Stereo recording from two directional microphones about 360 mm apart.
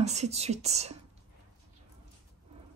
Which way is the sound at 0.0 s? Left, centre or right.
Centre.